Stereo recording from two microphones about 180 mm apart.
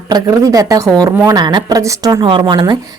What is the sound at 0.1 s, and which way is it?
A woman's voice, 20° right (ahead or behind).